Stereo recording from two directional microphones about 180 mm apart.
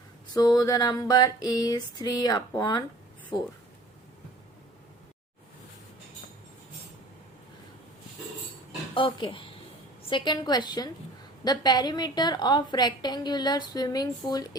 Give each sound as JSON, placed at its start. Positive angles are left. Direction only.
{"t": 0.3, "sound": "a woman's voice", "side_deg": 20}
{"t": 9.0, "sound": "a woman's voice", "side_deg": 25}